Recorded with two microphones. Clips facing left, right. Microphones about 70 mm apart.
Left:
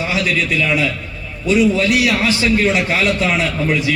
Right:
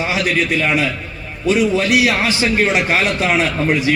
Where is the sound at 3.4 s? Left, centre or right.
Right.